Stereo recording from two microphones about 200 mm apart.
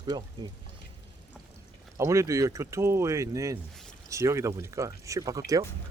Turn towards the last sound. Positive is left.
turn(degrees=-15)  # may be behind; listen again after turning